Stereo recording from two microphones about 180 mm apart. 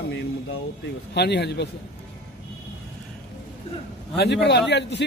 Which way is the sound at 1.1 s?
65° left (ahead or behind).